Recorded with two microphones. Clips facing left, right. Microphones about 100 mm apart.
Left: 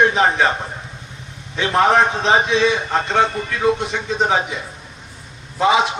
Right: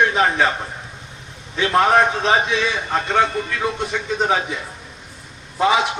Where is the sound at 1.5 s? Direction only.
25° left (ahead or behind).